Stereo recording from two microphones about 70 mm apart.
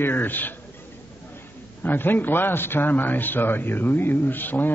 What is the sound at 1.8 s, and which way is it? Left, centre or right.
A man's voice, left.